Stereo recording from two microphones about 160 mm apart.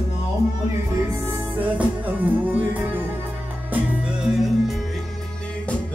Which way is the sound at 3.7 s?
5° right (ahead or behind).